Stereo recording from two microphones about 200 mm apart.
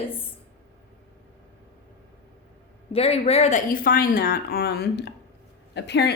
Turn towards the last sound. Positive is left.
turn(degrees=55)  # may be behind; listen again after turning